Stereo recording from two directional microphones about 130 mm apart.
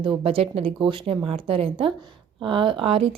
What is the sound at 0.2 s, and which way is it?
A woman's voice, 45° right (ahead or behind).